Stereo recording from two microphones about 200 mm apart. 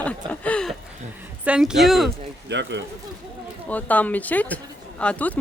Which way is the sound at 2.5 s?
60° right (ahead or behind).